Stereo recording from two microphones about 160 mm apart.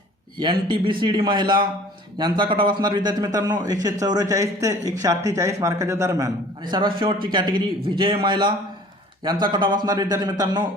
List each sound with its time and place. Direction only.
0.3 s speech: 30° right (ahead or behind)